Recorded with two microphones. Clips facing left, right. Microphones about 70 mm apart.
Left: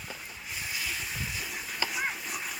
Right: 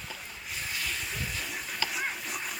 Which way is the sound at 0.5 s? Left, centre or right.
Centre.